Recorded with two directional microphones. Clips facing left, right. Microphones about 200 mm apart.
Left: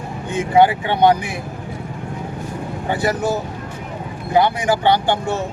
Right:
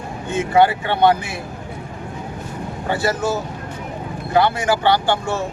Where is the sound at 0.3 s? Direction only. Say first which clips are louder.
Left 1 dB; 15° left (ahead or behind).